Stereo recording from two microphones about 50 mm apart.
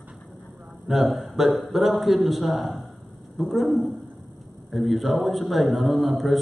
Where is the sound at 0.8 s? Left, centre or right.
Centre.